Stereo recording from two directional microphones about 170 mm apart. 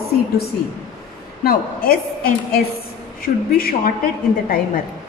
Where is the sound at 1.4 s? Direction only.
60° left (ahead or behind).